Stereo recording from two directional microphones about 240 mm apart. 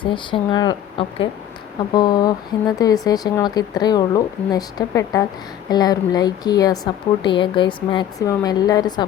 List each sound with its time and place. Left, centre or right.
0.0 s a woman's voice: left